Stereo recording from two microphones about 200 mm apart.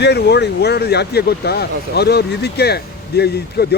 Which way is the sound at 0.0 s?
55° left (ahead or behind).